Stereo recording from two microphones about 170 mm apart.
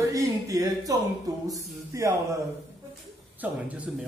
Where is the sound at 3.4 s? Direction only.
10° right (ahead or behind).